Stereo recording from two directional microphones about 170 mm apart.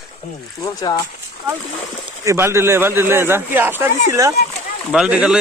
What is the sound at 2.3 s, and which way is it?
A man's voice, 15° right (ahead or behind).